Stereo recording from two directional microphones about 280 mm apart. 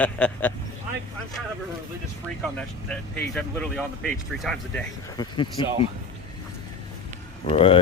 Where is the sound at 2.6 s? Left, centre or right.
Centre.